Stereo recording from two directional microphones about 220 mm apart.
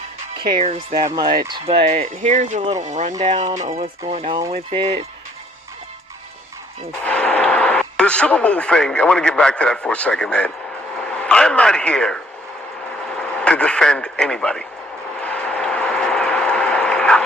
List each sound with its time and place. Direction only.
0.6 s speech: 30° right (ahead or behind)
1.0 s speech: 15° right (ahead or behind)
7.0 s a man's voice: 5° left (ahead or behind)
15.2 s train: 5° left (ahead or behind)